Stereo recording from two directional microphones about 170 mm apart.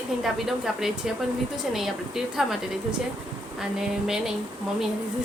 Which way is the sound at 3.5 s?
Centre (ahead or behind).